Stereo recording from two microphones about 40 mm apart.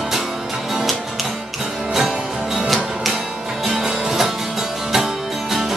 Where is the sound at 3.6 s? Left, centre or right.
Centre.